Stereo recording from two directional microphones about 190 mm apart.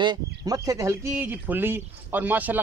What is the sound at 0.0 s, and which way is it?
Speech, 20° right (ahead or behind).